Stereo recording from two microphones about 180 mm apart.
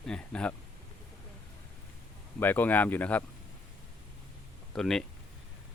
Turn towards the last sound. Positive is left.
turn(degrees=5)  # may be behind; listen again after turning